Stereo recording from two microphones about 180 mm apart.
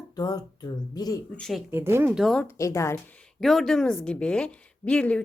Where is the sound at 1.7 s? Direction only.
15° right (ahead or behind).